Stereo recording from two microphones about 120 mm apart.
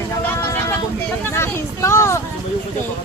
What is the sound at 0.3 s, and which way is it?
Vehicle, 20° left (ahead or behind).